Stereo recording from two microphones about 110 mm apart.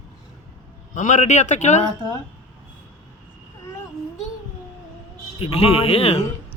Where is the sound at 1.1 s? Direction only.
90° left.